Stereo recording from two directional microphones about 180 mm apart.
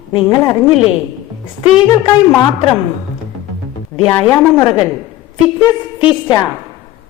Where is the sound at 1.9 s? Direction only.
20° left (ahead or behind).